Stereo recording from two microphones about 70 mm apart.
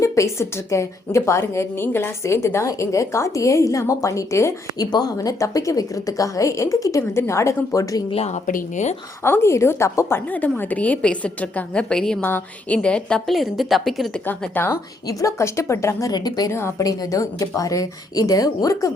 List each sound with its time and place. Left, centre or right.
0.0 s a woman's voice: left
4.8 s a woman's voice: left
9.2 s a woman's voice: left
10.3 s a woman's voice: left
12.2 s a woman's voice: left; by 14.1 s centre
14.3 s a woman's voice: left
15.0 s a woman's voice: left
16.1 s a woman's voice: left
16.5 s a woman's voice: left
16.8 s a woman's voice: left